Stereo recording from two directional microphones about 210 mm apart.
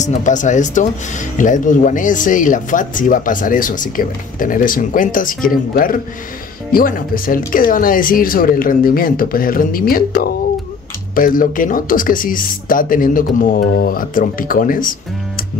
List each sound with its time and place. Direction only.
0.0 s speech: 35° left (ahead or behind)